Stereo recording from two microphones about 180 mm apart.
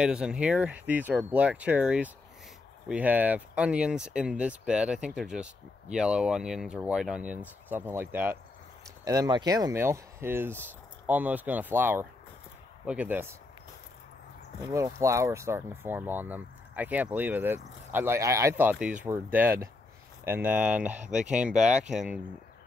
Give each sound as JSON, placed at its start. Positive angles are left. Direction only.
{"t": 0.0, "sound": "speech", "side_deg": -5}
{"t": 14.7, "sound": "speech", "side_deg": -15}